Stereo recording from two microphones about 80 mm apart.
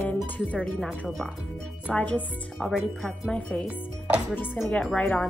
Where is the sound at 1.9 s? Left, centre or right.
Centre.